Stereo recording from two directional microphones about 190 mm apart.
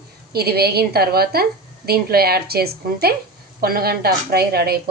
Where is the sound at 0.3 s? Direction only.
55° right (ahead or behind).